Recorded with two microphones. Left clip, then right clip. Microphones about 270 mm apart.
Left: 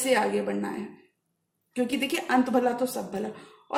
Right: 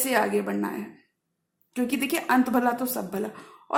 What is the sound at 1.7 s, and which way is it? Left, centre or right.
A man's voice, right.